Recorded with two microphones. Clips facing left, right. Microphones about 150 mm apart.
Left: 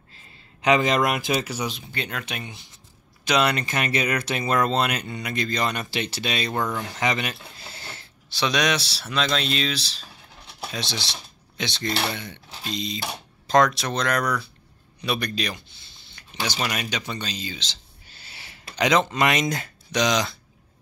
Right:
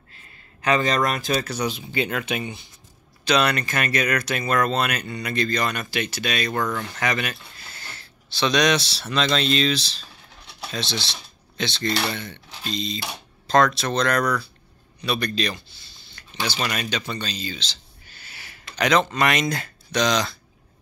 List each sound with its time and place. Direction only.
0.7 s speech: 15° left (ahead or behind)
1.7 s speech: 5° right (ahead or behind)
3.3 s speech: 20° left (ahead or behind)
8.4 s a man's voice: 10° left (ahead or behind)
16.2 s a sound: 15° left (ahead or behind)
16.5 s speech: 10° left (ahead or behind)
18.8 s speech: 20° left (ahead or behind)